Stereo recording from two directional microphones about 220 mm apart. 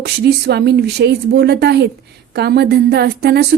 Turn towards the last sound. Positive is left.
turn(degrees=-50)  # may be behind; listen again after turning